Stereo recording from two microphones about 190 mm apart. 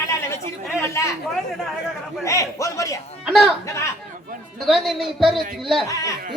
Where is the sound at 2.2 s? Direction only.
15° left (ahead or behind).